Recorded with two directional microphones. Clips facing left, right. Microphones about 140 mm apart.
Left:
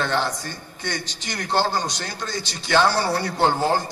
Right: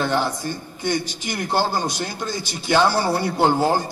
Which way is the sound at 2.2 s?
20° right (ahead or behind).